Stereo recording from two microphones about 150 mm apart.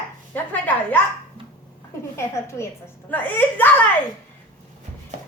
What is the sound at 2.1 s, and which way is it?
A woman's voice, 20° left (ahead or behind).